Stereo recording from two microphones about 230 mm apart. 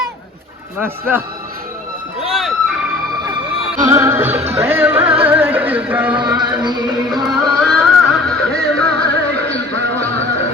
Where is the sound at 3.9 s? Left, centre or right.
Centre.